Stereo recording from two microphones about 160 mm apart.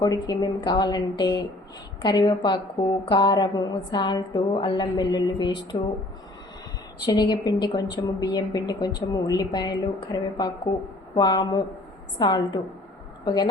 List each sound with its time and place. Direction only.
0.0 s a woman's voice: 20° left (ahead or behind)
7.0 s a woman's voice: 25° left (ahead or behind)